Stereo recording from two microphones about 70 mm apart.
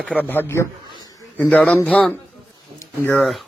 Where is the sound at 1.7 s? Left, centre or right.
Left.